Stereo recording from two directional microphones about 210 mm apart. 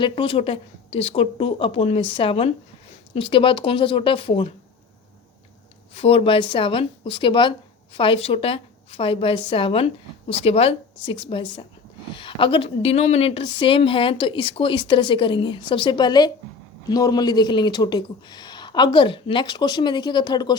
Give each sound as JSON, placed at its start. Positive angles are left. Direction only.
{"t": 0.0, "sound": "speech", "side_deg": 25}
{"t": 5.9, "sound": "speech", "side_deg": 25}